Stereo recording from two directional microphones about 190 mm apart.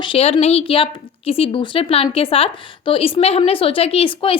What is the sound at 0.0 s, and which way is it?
A woman's voice, 30° left (ahead or behind).